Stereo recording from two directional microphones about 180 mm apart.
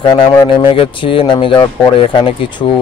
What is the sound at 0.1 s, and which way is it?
Speech, 25° left (ahead or behind).